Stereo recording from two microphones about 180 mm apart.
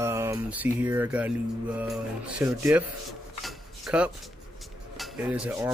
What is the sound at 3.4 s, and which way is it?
Cutlery, 5° right (ahead or behind).